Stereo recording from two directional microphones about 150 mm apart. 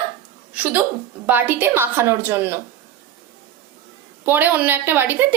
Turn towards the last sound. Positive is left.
turn(degrees=-15)  # may be behind; listen again after turning